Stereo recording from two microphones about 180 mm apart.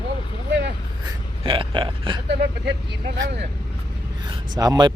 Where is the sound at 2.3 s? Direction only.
70° right (ahead or behind).